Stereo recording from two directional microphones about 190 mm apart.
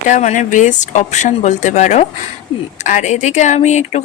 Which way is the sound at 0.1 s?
40° left (ahead or behind).